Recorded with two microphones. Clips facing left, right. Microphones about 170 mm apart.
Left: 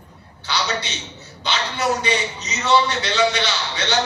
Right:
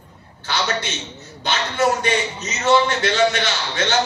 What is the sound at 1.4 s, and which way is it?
A man's voice, 50° right (ahead or behind).